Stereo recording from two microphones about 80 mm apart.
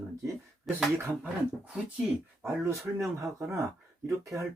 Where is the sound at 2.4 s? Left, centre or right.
Right.